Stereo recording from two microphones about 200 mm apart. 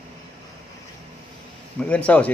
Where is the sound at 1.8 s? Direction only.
5° left (ahead or behind).